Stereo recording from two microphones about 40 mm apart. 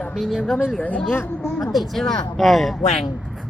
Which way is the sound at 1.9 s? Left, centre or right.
Centre.